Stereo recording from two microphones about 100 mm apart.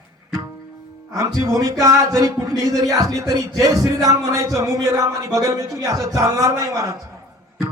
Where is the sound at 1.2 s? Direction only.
35° right (ahead or behind).